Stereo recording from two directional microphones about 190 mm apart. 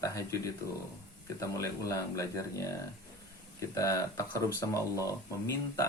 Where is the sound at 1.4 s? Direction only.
15° left (ahead or behind).